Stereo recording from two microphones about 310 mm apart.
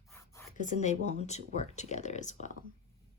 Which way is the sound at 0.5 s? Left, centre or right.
Left.